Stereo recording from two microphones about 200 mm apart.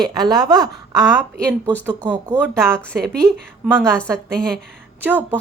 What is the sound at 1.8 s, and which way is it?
Speech, 10° right (ahead or behind).